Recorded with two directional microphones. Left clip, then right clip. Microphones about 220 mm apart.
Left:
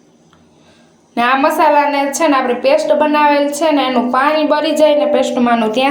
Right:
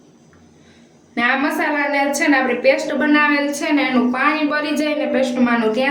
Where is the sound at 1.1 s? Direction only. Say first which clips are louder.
Left 6 dB; 30° left (ahead or behind).